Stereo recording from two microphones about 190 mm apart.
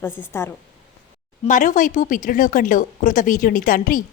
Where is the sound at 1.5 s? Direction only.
40° left (ahead or behind).